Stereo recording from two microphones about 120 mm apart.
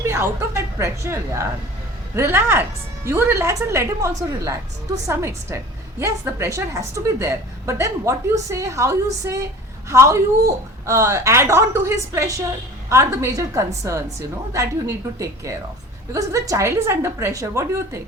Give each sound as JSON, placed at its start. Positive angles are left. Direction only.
{"t": 0.0, "sound": "a woman's voice", "side_deg": -20}